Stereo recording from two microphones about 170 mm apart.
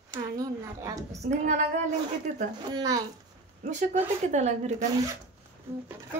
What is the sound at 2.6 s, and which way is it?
Speech, 25° right (ahead or behind).